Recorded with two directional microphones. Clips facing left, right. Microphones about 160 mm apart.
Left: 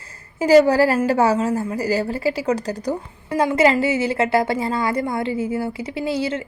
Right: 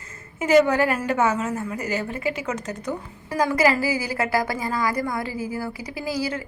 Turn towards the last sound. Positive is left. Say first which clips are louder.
# left 4 dB
turn(degrees=25)  # may be behind; listen again after turning